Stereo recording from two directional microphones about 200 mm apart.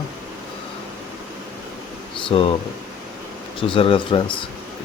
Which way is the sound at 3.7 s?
25° left (ahead or behind).